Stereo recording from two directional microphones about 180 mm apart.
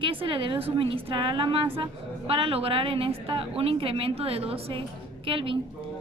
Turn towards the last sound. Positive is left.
turn(degrees=-30)  # may be behind; listen again after turning